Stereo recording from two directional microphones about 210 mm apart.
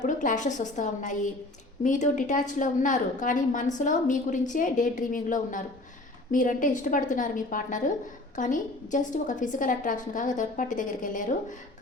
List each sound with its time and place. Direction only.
0.0 s a woman's voice: 35° left (ahead or behind)